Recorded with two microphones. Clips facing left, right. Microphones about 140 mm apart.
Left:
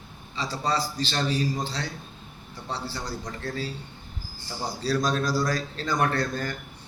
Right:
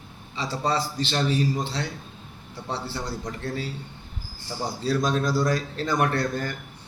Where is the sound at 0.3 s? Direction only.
25° right (ahead or behind).